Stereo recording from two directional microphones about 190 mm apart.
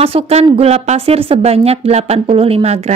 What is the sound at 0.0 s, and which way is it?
A woman's voice, 30° right (ahead or behind).